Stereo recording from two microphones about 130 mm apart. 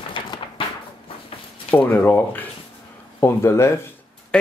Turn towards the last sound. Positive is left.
turn(degrees=5)  # may be behind; listen again after turning